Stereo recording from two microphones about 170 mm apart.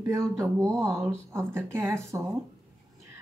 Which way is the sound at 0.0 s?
20° right (ahead or behind).